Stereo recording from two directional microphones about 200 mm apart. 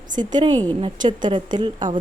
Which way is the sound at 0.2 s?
20° right (ahead or behind).